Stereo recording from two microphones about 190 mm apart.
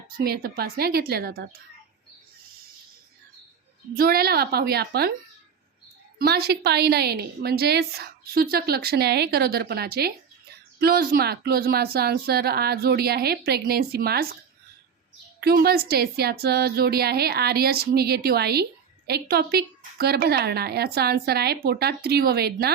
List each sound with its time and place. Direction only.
0.2 s a woman's voice: 55° right (ahead or behind)
3.9 s a woman's voice: 55° right (ahead or behind)
6.1 s a woman's voice: 55° right (ahead or behind)
15.4 s a woman's voice: 55° right (ahead or behind)